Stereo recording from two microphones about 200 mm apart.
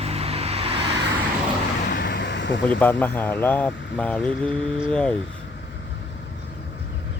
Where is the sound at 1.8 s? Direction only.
55° left (ahead or behind).